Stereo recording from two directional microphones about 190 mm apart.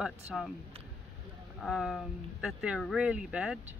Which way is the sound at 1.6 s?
Centre (ahead or behind).